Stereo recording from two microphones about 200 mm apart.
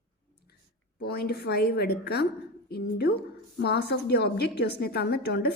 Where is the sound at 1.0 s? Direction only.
55° left (ahead or behind).